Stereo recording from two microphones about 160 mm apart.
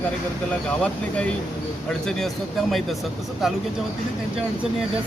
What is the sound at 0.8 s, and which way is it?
Speech, 10° left (ahead or behind).